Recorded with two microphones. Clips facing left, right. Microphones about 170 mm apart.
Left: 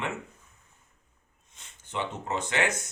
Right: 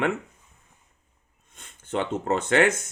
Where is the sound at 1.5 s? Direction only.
55° right (ahead or behind).